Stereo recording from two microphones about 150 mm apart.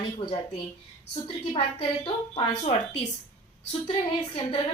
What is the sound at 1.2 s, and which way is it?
A woman's voice, 40° left (ahead or behind).